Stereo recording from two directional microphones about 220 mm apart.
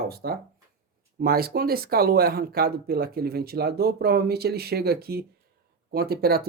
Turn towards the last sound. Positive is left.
turn(degrees=-45)  # may be behind; listen again after turning